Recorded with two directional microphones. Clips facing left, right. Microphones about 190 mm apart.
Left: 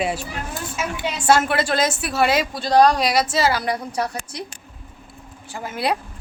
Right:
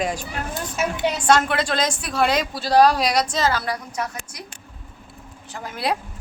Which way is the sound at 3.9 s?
35° left (ahead or behind).